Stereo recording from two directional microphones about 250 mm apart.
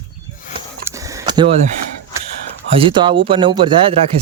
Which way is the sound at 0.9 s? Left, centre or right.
Centre.